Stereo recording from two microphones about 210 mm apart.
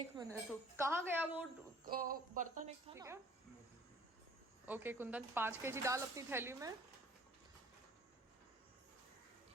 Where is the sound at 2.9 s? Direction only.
15° right (ahead or behind).